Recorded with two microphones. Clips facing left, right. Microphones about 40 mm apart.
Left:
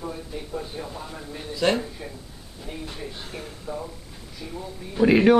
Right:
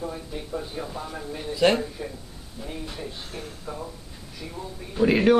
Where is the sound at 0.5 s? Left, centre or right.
Centre.